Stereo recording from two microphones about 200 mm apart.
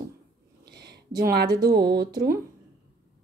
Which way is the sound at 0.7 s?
55° right (ahead or behind).